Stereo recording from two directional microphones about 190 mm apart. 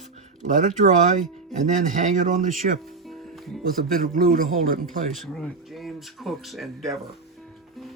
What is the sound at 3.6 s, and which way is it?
A man's voice, 50° right (ahead or behind).